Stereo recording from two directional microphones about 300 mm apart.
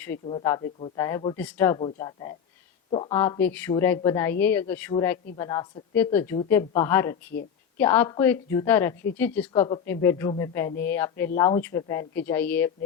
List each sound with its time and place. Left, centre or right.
0.3 s a woman's voice: centre